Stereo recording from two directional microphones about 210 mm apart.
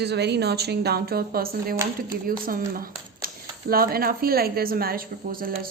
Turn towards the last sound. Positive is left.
turn(degrees=-45)  # may be behind; listen again after turning